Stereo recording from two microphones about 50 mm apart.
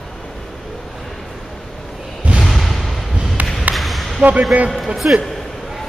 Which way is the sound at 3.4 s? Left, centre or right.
Right.